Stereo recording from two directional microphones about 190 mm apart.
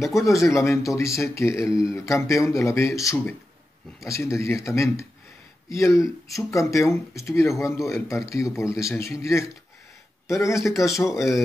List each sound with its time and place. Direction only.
0.1 s speech: 15° left (ahead or behind)
10.5 s speech: centre (ahead or behind)